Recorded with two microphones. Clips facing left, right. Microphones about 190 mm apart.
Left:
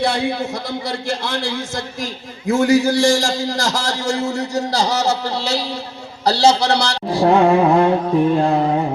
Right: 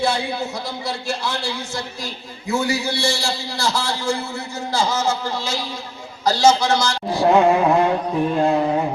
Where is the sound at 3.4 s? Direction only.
90° left.